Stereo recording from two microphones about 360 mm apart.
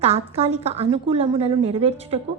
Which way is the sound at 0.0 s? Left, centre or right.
Centre.